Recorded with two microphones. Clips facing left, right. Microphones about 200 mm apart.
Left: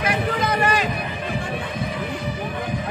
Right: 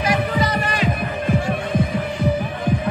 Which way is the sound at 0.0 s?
55° left (ahead or behind).